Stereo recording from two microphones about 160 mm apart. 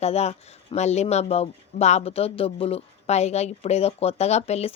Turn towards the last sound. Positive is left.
turn(degrees=40)  # may be behind; listen again after turning